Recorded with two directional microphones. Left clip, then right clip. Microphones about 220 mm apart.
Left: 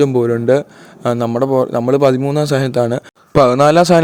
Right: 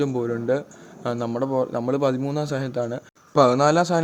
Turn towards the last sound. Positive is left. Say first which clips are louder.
# left 9 dB
turn(degrees=40)  # may be behind; listen again after turning